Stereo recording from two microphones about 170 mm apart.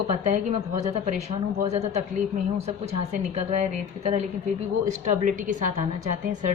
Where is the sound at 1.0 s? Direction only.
40° right (ahead or behind).